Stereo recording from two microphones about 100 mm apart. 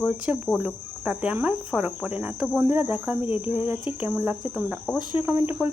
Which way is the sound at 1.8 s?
10° right (ahead or behind).